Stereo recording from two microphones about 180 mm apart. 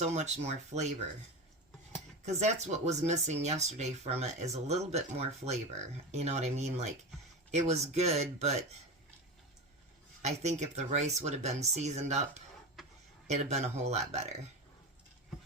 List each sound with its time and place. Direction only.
0.0 s speech: 40° right (ahead or behind)
2.2 s speech: 40° right (ahead or behind)
10.2 s speech: 40° right (ahead or behind)
12.8 s a sound: centre (ahead or behind)
13.2 s speech: 40° right (ahead or behind)